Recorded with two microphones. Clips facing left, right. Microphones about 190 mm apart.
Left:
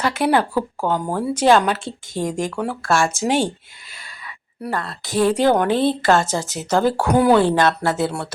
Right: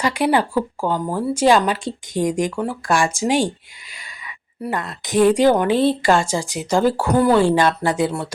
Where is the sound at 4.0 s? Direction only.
15° right (ahead or behind).